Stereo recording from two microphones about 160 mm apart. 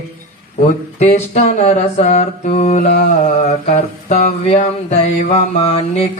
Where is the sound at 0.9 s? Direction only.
40° left (ahead or behind).